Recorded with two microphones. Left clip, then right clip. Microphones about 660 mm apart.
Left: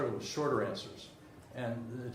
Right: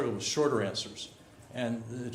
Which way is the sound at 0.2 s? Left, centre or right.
Right.